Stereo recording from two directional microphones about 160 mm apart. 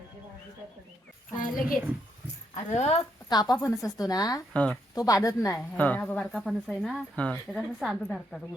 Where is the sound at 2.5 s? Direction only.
40° left (ahead or behind).